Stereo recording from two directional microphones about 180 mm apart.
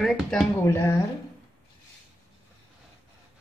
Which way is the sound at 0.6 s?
15° left (ahead or behind).